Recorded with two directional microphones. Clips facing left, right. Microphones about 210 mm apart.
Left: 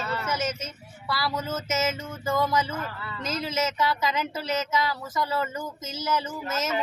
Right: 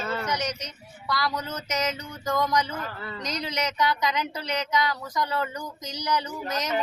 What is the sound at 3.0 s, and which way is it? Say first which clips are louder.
Speech: right 1 dB; 45° right (ahead or behind).